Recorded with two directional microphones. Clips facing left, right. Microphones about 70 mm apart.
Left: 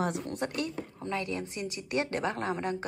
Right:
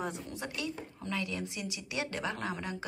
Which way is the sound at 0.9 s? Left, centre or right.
Left.